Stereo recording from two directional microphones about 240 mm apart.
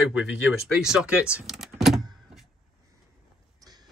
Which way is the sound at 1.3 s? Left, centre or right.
Centre.